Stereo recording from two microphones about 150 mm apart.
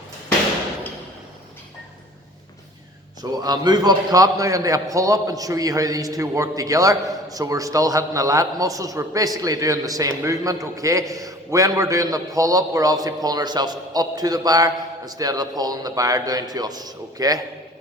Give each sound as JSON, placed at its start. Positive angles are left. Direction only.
{"t": 3.2, "sound": "a man's voice", "side_deg": -25}